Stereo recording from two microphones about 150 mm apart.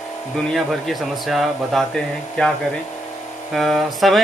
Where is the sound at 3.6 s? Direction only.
Centre (ahead or behind).